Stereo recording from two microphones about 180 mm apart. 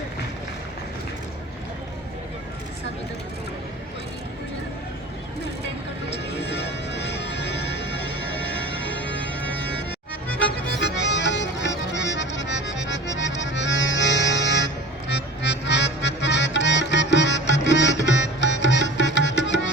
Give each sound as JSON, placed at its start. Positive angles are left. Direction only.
{"t": 6.4, "sound": "music", "side_deg": 75}
{"t": 8.4, "sound": "music", "side_deg": 10}
{"t": 10.8, "sound": "music", "side_deg": 80}